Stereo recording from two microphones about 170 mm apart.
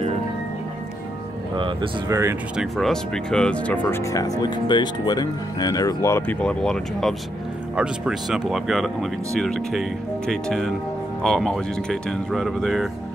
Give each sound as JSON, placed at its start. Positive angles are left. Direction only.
{"t": 2.0, "sound": "speech", "side_deg": -15}
{"t": 2.5, "sound": "speech", "side_deg": 0}